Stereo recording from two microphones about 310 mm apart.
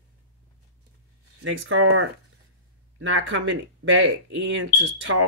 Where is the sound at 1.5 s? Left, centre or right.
Right.